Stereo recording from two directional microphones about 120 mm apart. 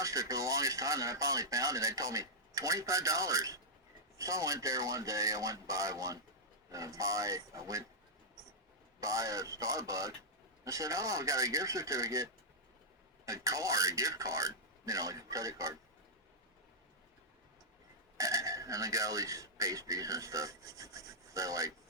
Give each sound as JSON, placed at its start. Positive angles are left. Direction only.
{"t": 0.0, "sound": "speech", "side_deg": -25}
{"t": 9.0, "sound": "speech", "side_deg": -30}
{"t": 18.2, "sound": "speech", "side_deg": -25}